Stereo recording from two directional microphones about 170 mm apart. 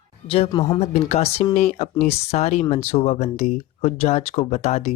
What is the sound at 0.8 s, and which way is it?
Speech, 40° left (ahead or behind).